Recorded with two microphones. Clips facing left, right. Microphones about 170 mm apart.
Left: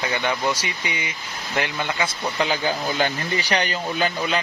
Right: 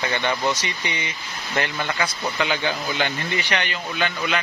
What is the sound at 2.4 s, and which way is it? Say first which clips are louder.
Speech: left 2 dB; 35° left (ahead or behind).